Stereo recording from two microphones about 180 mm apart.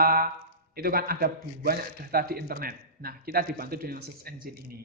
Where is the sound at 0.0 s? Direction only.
55° right (ahead or behind).